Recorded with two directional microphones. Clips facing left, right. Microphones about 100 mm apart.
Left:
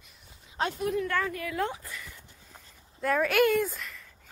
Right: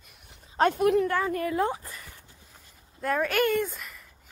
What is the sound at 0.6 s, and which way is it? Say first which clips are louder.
Speech: right 7 dB; 55° right (ahead or behind).